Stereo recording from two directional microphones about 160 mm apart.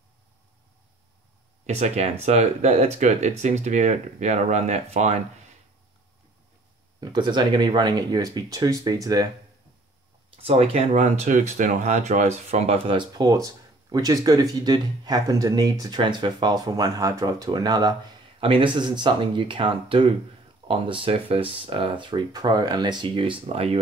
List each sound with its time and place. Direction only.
1.7 s speech: 40° right (ahead or behind)
7.0 s speech: 25° right (ahead or behind)
10.3 s speech: 40° right (ahead or behind)